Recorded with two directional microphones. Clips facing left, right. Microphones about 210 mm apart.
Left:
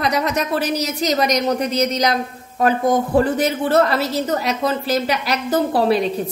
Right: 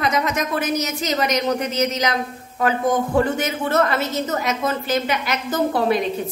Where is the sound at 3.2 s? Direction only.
35° left (ahead or behind).